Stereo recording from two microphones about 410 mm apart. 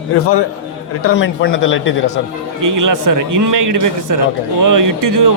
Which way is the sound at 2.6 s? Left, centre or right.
Right.